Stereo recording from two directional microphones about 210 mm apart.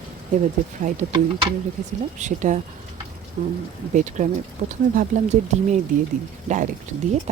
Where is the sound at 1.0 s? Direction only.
30° right (ahead or behind).